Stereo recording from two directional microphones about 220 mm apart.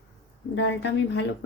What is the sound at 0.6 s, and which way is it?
Speech, 55° left (ahead or behind).